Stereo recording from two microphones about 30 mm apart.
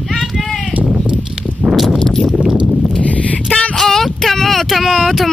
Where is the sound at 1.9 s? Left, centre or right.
Centre.